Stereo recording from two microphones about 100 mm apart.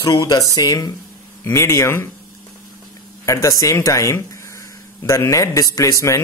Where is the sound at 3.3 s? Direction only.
35° left (ahead or behind).